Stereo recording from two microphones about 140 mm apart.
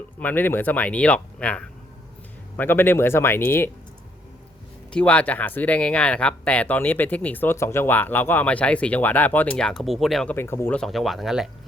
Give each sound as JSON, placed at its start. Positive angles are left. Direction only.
{"t": 0.2, "sound": "speech", "side_deg": 15}
{"t": 4.9, "sound": "speech", "side_deg": 10}
{"t": 10.3, "sound": "speech", "side_deg": 15}
{"t": 10.8, "sound": "speech", "side_deg": 0}